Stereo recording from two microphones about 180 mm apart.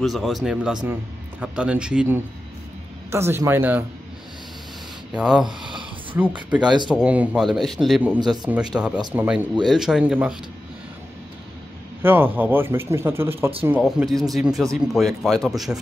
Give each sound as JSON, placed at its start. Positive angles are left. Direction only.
{"t": 0.0, "sound": "a man's voice", "side_deg": 0}
{"t": 5.1, "sound": "speech", "side_deg": -5}
{"t": 5.4, "sound": "speech", "side_deg": -25}
{"t": 6.5, "sound": "a man's voice", "side_deg": -5}
{"t": 12.0, "sound": "a man's voice", "side_deg": -10}
{"t": 13.7, "sound": "speech", "side_deg": 0}